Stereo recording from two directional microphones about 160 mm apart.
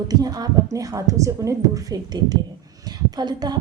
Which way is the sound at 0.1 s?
25° right (ahead or behind).